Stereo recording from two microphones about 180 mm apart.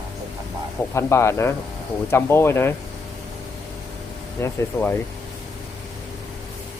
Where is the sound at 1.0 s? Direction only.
15° left (ahead or behind).